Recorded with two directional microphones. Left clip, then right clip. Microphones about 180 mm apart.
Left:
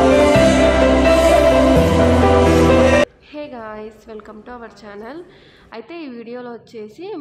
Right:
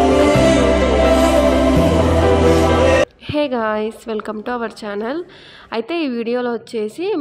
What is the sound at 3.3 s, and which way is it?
A woman's voice, 50° right (ahead or behind).